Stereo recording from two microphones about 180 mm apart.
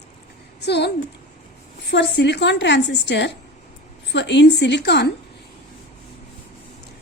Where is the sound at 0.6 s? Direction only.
70° left (ahead or behind).